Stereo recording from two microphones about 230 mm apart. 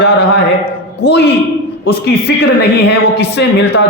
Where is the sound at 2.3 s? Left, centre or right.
Left.